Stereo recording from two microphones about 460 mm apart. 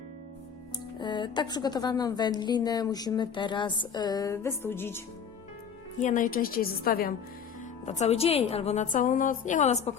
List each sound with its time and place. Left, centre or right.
0.9 s a woman's voice: centre
6.0 s a woman's voice: centre